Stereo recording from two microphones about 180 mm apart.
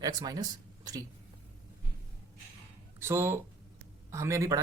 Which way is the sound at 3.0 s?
15° right (ahead or behind).